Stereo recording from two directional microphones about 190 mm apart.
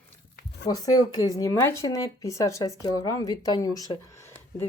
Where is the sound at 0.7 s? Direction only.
20° left (ahead or behind).